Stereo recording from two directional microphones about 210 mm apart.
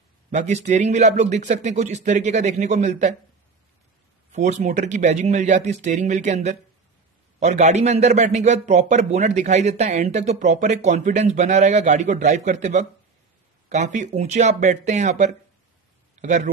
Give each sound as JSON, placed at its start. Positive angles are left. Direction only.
{"t": 0.3, "sound": "a man's voice", "side_deg": -35}
{"t": 4.3, "sound": "a man's voice", "side_deg": -35}